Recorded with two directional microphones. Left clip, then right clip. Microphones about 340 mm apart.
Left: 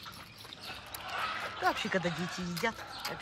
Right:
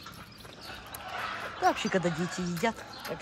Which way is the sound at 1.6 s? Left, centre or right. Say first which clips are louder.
Right 4 dB; centre.